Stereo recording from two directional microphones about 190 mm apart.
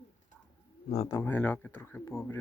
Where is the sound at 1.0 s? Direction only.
15° left (ahead or behind).